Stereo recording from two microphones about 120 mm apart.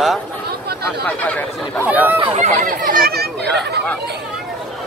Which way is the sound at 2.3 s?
75° right (ahead or behind).